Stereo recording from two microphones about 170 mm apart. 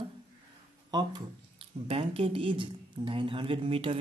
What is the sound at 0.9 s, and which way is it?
Speech, 30° right (ahead or behind).